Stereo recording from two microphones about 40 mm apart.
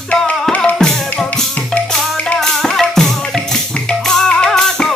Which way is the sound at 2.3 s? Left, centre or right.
Centre.